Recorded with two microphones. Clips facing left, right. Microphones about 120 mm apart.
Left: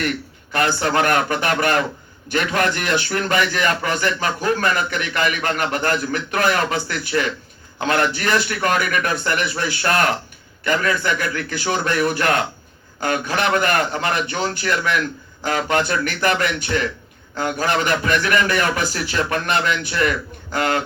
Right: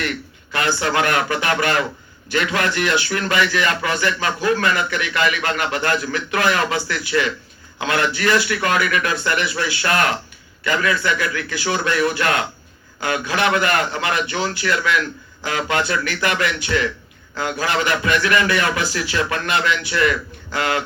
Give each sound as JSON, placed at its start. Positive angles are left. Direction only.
{"t": 0.5, "sound": "a man's voice", "side_deg": 40}